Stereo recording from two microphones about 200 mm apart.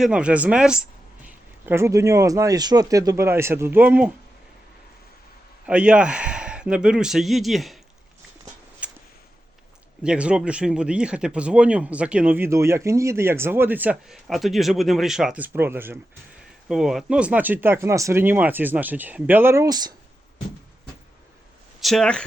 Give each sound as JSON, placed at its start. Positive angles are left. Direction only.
{"t": 0.0, "sound": "speech", "side_deg": -5}
{"t": 5.6, "sound": "speech", "side_deg": -5}
{"t": 8.8, "sound": "whip", "side_deg": -5}
{"t": 10.0, "sound": "speech", "side_deg": -5}
{"t": 21.8, "sound": "speech", "side_deg": 0}